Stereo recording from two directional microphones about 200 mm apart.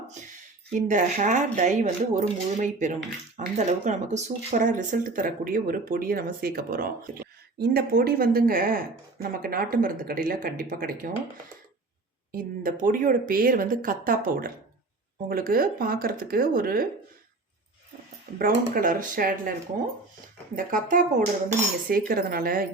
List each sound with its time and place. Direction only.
0.7 s speech: 40° right (ahead or behind)
12.3 s speech: 45° right (ahead or behind)
18.3 s speech: 45° right (ahead or behind)
20.6 s speech: 40° right (ahead or behind)